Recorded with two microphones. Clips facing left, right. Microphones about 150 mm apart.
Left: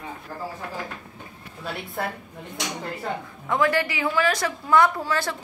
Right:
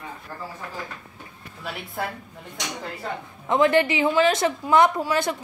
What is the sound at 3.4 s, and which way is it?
A woman's voice, 20° right (ahead or behind).